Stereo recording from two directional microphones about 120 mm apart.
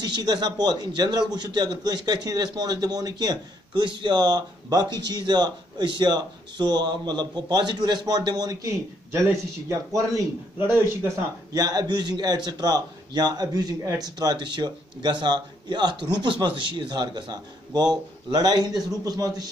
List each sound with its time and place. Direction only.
0.1 s a man's voice: 35° right (ahead or behind)
11.5 s a man's voice: 35° right (ahead or behind)